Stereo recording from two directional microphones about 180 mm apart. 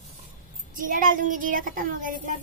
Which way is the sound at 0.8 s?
50° right (ahead or behind).